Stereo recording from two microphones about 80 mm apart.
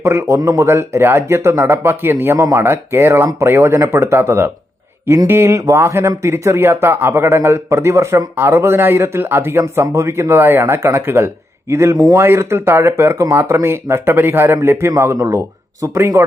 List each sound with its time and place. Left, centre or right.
0.0 s speech: right